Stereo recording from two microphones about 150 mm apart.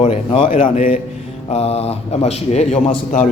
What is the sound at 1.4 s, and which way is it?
Speech, 45° left (ahead or behind).